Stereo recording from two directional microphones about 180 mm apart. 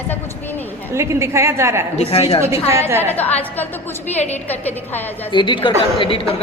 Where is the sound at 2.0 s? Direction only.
35° left (ahead or behind).